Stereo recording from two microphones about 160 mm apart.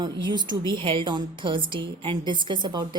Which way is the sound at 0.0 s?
30° right (ahead or behind).